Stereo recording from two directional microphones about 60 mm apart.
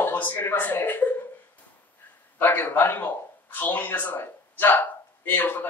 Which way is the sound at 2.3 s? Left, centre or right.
Left.